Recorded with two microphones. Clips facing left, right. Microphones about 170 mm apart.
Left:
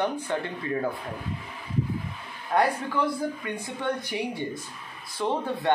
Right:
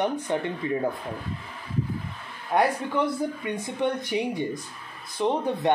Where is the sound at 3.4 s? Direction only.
20° right (ahead or behind).